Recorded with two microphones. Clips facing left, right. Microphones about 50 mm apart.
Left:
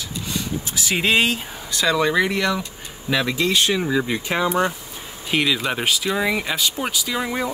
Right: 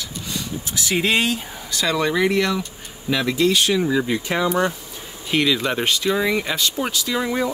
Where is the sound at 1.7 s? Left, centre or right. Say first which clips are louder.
Left 1 dB; centre.